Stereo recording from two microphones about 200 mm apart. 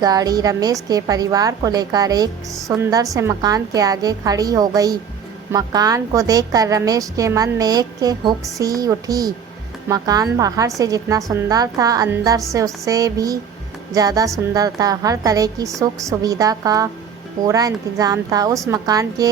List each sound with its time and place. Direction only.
0.0 s a woman's voice: 20° right (ahead or behind)